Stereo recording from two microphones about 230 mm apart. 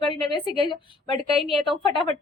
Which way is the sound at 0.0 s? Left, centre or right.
Right.